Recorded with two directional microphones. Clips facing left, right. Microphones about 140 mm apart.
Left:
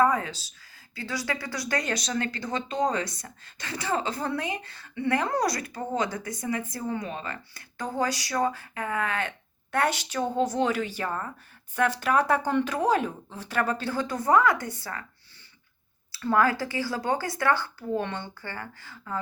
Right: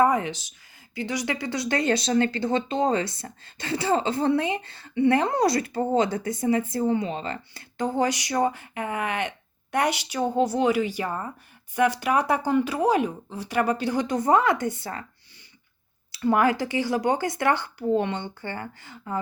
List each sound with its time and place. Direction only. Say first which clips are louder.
0.0 s speech: right 2 dB; 20° right (ahead or behind)
16.1 s speech: right 3 dB; 20° right (ahead or behind)